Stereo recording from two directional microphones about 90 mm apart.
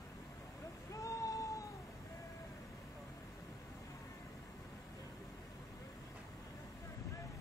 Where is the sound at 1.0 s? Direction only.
40° left (ahead or behind).